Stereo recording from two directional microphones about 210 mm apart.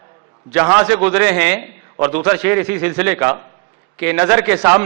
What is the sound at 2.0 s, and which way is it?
A man's voice, 10° right (ahead or behind).